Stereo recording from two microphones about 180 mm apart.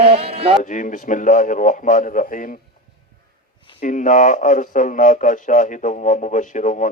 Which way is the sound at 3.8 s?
45° left (ahead or behind).